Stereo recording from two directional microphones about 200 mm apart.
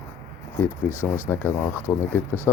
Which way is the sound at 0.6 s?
10° left (ahead or behind).